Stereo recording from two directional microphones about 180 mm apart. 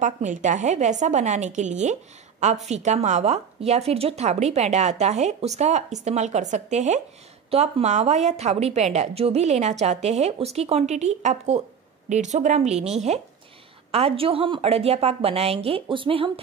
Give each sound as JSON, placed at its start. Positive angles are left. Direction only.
{"t": 0.0, "sound": "a woman's voice", "side_deg": -45}